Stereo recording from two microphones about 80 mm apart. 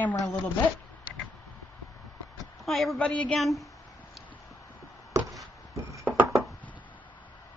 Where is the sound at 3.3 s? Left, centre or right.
Centre.